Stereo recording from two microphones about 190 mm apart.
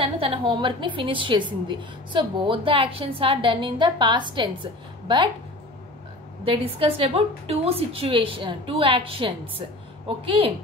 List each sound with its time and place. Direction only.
0.0 s a woman's voice: 30° right (ahead or behind)
6.4 s a woman's voice: 30° right (ahead or behind)